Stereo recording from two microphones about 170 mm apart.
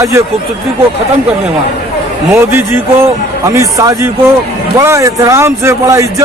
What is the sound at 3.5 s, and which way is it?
A man's voice, 20° right (ahead or behind).